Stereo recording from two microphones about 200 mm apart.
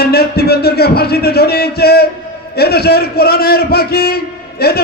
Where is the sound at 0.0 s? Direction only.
50° left (ahead or behind).